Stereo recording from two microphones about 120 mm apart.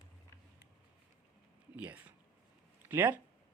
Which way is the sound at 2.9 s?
15° right (ahead or behind).